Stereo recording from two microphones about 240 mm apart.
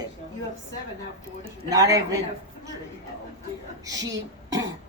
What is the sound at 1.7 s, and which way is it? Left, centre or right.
Speech, centre.